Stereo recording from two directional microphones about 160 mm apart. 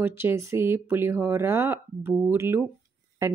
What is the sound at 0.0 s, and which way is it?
Speech, 15° right (ahead or behind).